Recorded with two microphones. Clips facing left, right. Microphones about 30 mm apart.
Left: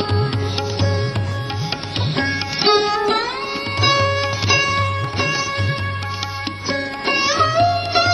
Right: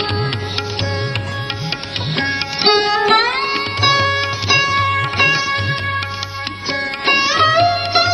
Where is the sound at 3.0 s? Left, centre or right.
Right.